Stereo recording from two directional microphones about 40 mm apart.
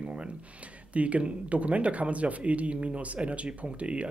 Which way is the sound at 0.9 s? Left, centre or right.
Right.